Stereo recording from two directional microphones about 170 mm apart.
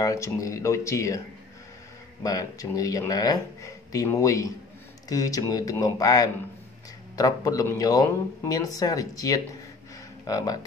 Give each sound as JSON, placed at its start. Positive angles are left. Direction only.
{"t": 0.0, "sound": "speech", "side_deg": 20}
{"t": 2.2, "sound": "speech", "side_deg": 20}